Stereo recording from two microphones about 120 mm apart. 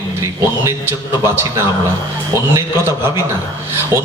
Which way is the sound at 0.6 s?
20° right (ahead or behind).